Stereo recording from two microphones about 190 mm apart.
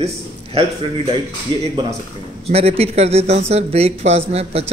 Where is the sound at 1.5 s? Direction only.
25° right (ahead or behind).